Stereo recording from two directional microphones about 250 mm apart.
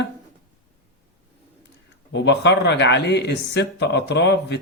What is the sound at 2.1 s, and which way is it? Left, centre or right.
Speech, left.